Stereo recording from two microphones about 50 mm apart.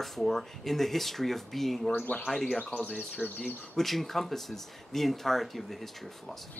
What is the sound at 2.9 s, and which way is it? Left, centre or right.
Speech, centre.